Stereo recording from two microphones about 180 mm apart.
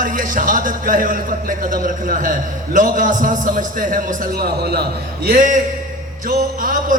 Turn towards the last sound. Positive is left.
turn(degrees=-50)  # may be behind; listen again after turning